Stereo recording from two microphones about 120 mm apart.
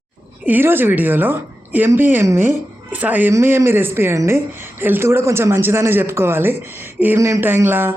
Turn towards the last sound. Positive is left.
turn(degrees=-20)  # may be behind; listen again after turning